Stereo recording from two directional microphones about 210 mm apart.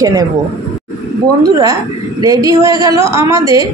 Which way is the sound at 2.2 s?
15° right (ahead or behind).